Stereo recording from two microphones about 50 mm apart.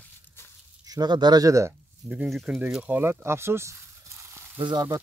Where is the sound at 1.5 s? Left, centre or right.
Right.